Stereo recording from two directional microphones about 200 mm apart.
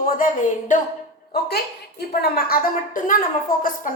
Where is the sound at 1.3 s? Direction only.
50° left (ahead or behind).